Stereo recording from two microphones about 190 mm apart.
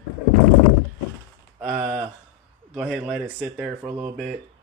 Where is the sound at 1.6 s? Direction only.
5° right (ahead or behind).